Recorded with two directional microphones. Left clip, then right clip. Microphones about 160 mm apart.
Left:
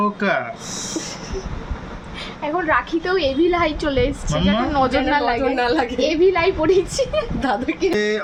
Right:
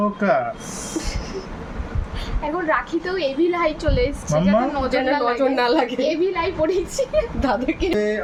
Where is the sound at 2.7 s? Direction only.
60° left (ahead or behind).